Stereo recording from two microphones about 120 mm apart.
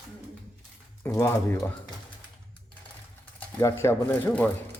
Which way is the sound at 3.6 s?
20° left (ahead or behind).